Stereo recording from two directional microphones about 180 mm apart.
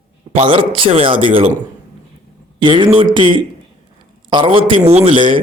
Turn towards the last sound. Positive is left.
turn(degrees=-30)  # may be behind; listen again after turning